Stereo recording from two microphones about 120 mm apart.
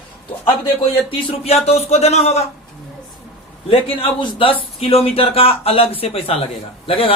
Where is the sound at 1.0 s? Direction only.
55° left (ahead or behind).